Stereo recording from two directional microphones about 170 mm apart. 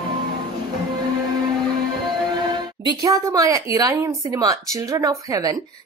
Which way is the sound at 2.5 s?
25° right (ahead or behind).